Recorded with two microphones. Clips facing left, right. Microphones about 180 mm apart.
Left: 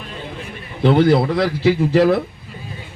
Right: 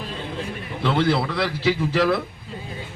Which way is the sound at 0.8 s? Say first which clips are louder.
Left 7 dB; 35° left (ahead or behind).